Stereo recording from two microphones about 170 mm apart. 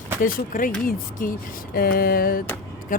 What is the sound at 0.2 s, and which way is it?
Speech, 55° left (ahead or behind).